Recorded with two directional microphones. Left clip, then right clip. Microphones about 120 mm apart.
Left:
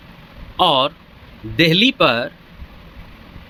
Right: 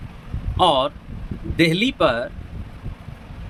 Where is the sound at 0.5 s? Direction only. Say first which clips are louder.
Left 2 dB; 20° left (ahead or behind).